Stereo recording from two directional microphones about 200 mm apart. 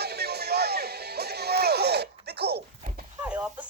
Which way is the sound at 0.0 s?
55° right (ahead or behind).